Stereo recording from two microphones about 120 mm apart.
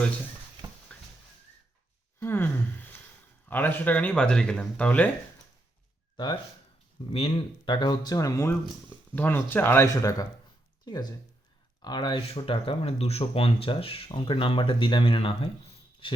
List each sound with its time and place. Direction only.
0.9 s a sound: 10° left (ahead or behind)
2.2 s sigh: 15° left (ahead or behind)
3.5 s speech: 15° left (ahead or behind)
7.1 s speech: 50° left (ahead or behind); by 8.5 s 25° left (ahead or behind)
9.1 s speech: 15° left (ahead or behind); by 12.2 s 40° left (ahead or behind)
12.3 s speech: 50° left (ahead or behind)